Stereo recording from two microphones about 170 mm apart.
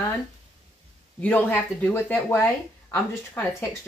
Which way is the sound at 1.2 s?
10° left (ahead or behind).